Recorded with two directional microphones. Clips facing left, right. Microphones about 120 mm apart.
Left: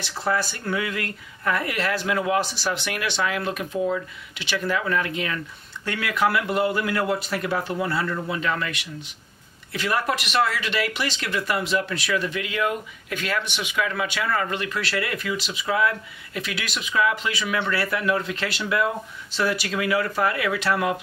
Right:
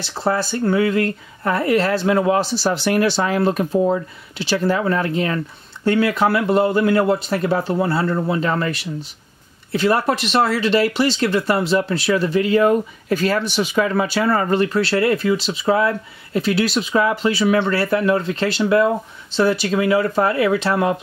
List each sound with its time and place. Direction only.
0.0 s speech: 30° right (ahead or behind)